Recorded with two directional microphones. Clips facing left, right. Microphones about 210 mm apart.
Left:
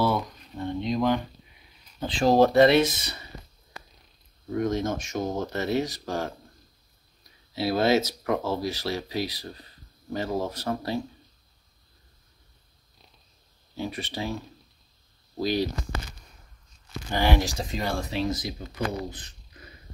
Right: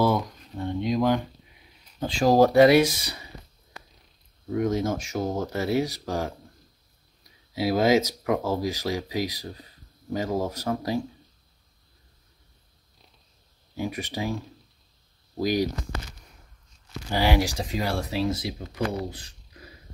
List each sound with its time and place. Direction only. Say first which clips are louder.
0.0 s a sound: right 2 dB; 10° right (ahead or behind)
2.0 s speech: right 1 dB; 10° right (ahead or behind)
4.5 s speech: right 1 dB; 10° right (ahead or behind)
7.5 s speech: right 2 dB; 10° right (ahead or behind)
13.7 s speech: right 2 dB; 15° right (ahead or behind)
17.1 s speech: right 1 dB; 10° right (ahead or behind)